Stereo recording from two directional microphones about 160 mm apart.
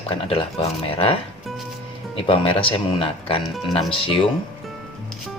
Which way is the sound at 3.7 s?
35° left (ahead or behind).